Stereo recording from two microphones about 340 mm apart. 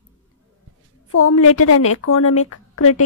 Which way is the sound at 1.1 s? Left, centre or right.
Left.